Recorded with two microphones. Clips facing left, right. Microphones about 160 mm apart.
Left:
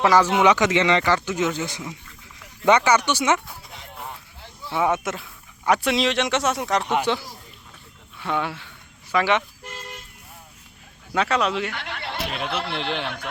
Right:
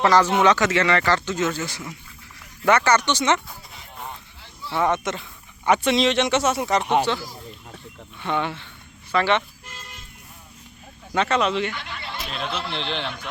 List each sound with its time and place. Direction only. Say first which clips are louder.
0.0 s speech: even; 10° left (ahead or behind)
3.9 s a sound: right 1 dB; 5° left (ahead or behind)
4.7 s speech: even; 5° left (ahead or behind)
7.1 s speech: left 1 dB; 15° left (ahead or behind)
8.2 s speech: right 1 dB; 5° left (ahead or behind)
11.1 s speech: right 1 dB; centre (ahead or behind)
11.7 s a sound: left 2 dB; 70° left (ahead or behind)
12.5 s a man's voice: left 2 dB; 65° left (ahead or behind)
12.7 s speech: left 1 dB; 10° left (ahead or behind)